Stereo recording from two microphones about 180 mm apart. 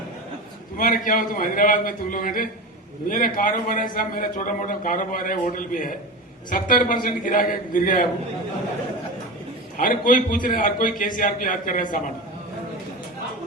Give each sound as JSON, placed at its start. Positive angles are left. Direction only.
{"t": 0.8, "sound": "a man's voice", "side_deg": 50}
{"t": 9.7, "sound": "a man's voice", "side_deg": 50}